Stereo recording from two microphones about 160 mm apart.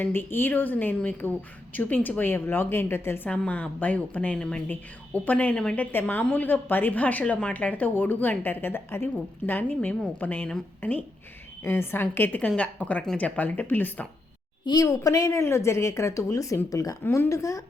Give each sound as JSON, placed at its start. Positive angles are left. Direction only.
{"t": 0.0, "sound": "speech", "side_deg": 15}
{"t": 14.6, "sound": "speech", "side_deg": 25}